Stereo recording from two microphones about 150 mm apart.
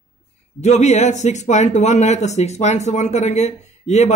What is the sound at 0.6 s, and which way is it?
Speech, 50° left (ahead or behind).